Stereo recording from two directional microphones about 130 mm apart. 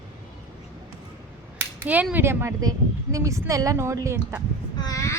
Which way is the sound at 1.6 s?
10° right (ahead or behind).